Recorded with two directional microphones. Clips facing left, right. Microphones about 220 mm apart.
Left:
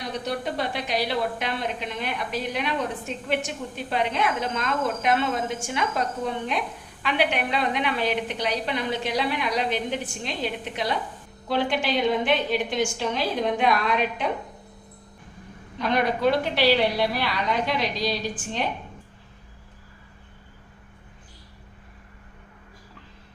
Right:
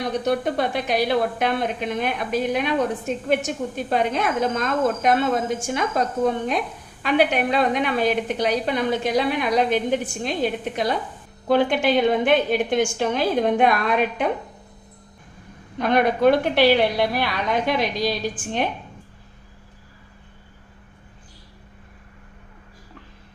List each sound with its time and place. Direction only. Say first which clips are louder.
0.3 s a woman's voice: right 6 dB; 50° right (ahead or behind)
15.8 s a woman's voice: right 5 dB; 55° right (ahead or behind)